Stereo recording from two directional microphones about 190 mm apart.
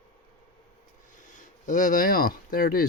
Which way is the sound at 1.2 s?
45° left (ahead or behind).